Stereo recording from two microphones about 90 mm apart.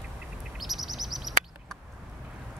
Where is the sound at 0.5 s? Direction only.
Centre (ahead or behind).